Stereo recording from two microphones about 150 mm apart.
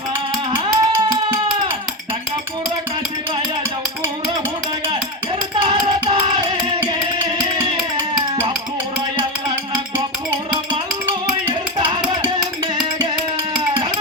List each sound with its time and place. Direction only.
0.5 s music: 30° right (ahead or behind)
5.6 s music: 35° right (ahead or behind)
11.4 s music: 35° right (ahead or behind)